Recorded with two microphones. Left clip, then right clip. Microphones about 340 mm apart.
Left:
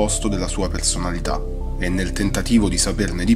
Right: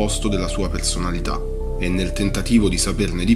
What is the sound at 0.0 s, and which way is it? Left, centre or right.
Speech, left.